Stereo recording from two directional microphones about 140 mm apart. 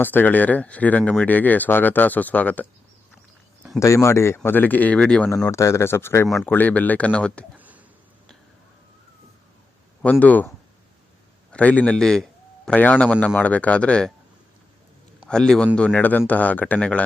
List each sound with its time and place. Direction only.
0.0 s speech: 15° left (ahead or behind)
3.8 s speech: 20° left (ahead or behind); by 5.3 s 5° left (ahead or behind)
5.5 s speech: 20° left (ahead or behind)
7.5 s a sound: 10° right (ahead or behind)
10.0 s speech: 10° left (ahead or behind)
11.5 s speech: 10° left (ahead or behind)
15.3 s speech: 5° left (ahead or behind)